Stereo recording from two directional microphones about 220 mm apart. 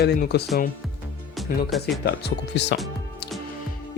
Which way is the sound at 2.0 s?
50° left (ahead or behind).